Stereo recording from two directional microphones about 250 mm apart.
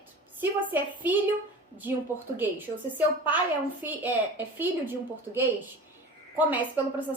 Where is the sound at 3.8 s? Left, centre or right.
Centre.